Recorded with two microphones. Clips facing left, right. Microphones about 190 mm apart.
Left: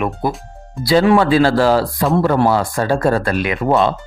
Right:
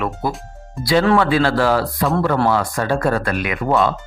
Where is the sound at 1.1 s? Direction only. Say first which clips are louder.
Left 3 dB; 35° left (ahead or behind).